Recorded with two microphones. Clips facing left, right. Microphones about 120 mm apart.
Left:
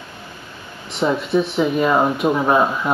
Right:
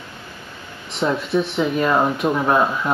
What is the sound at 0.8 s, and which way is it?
Speech, centre (ahead or behind).